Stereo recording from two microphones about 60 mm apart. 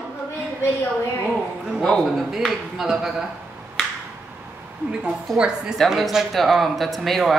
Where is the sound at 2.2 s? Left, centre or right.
Centre.